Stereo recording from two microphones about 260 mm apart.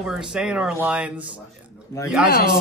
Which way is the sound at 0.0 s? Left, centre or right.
Centre.